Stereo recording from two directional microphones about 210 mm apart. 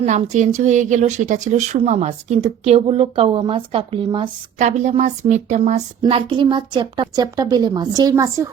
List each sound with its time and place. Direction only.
0.0 s a woman's voice: 35° right (ahead or behind); by 8.4 s 15° right (ahead or behind)